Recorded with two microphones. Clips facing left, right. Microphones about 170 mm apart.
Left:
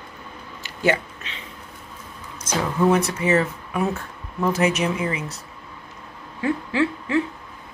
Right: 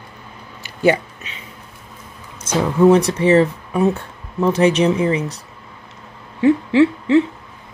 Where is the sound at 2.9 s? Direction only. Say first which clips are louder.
Right 6 dB; 30° right (ahead or behind).